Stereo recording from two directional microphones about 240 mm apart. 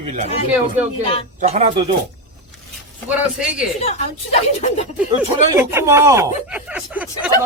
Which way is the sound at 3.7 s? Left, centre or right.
Left.